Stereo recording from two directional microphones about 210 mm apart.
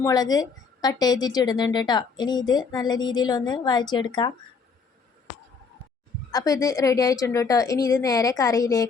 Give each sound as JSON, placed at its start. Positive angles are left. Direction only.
{"t": 0.0, "sound": "a woman's voice", "side_deg": 15}
{"t": 6.3, "sound": "a woman's voice", "side_deg": 15}